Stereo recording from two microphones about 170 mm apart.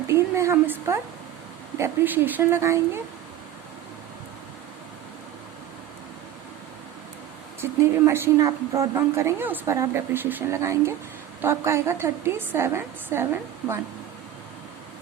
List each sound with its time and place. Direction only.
0.1 s a sound: 15° right (ahead or behind)
1.8 s a woman's voice: 10° right (ahead or behind)
7.6 s a woman's voice: 15° right (ahead or behind)